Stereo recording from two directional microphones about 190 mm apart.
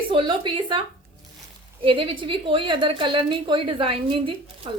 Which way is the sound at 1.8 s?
25° right (ahead or behind).